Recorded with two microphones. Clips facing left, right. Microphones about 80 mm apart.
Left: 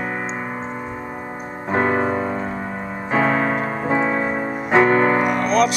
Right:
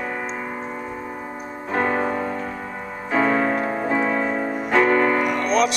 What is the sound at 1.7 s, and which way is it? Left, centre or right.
Music, left.